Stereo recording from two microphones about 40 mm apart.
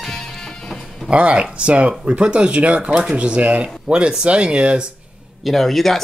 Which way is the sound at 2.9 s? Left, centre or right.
Centre.